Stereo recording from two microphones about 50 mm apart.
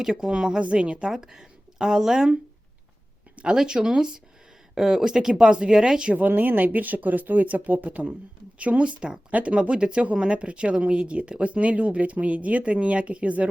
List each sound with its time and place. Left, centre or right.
0.0 s speech: centre
3.5 s speech: centre
6.1 s speech: right